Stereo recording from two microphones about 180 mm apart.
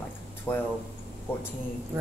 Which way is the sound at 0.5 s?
10° left (ahead or behind).